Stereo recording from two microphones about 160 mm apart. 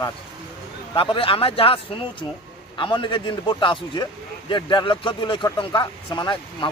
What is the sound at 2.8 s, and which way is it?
A man's voice, 30° left (ahead or behind).